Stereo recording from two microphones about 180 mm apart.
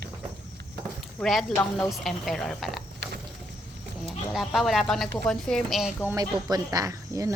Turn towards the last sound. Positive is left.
turn(degrees=-20)  # may be behind; listen again after turning